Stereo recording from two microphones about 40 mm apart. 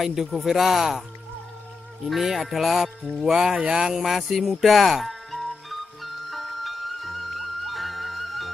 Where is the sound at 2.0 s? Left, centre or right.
Centre.